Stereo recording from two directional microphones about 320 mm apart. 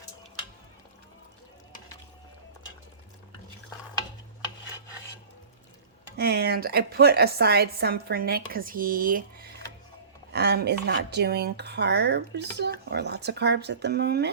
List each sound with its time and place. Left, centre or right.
6.1 s a woman's voice: right